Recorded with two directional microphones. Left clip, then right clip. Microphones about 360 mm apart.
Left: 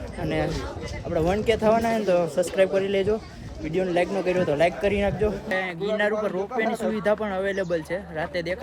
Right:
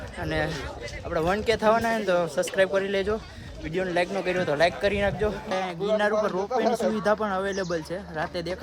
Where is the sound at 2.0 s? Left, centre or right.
Centre.